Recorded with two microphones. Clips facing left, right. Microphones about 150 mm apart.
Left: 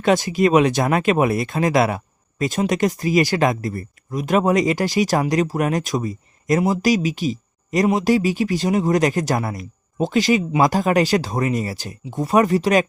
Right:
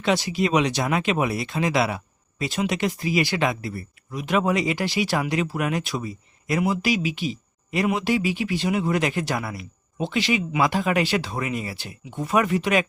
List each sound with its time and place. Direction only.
0.0 s speech: 50° left (ahead or behind)